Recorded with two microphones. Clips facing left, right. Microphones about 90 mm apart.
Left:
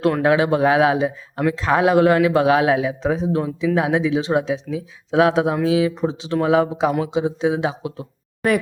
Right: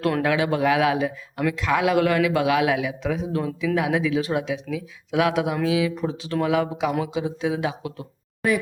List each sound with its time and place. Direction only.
0.2 s a man's voice: 30° left (ahead or behind)